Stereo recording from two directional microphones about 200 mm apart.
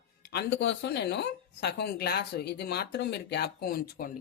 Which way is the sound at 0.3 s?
55° left (ahead or behind).